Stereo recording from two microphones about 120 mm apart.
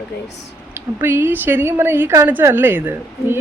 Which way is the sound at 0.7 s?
20° right (ahead or behind).